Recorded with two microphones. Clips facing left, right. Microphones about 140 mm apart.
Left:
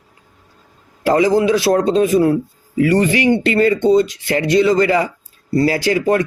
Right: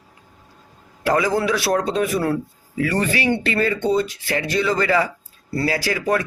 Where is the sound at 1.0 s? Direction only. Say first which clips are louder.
Left 6 dB; 25° left (ahead or behind).